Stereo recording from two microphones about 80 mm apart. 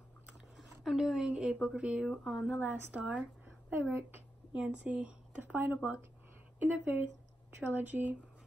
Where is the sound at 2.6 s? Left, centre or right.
Centre.